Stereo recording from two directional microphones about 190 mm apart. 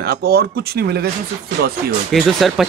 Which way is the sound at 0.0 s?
55° right (ahead or behind).